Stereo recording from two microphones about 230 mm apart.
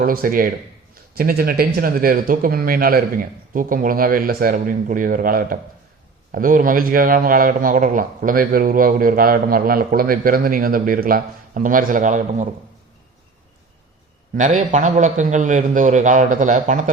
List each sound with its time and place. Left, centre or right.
0.0 s a man's voice: right
14.3 s a man's voice: right